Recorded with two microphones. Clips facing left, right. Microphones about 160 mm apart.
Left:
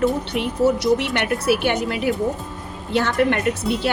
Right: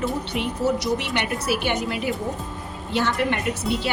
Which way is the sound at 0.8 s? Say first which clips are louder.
Left 5 dB; 55° left (ahead or behind).